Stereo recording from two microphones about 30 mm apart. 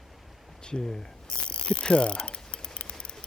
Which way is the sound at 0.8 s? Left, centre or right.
Left.